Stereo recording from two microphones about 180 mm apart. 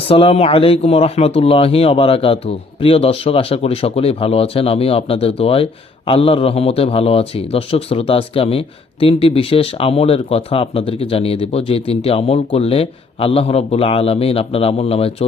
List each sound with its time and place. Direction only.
0.1 s a man's voice: 30° left (ahead or behind)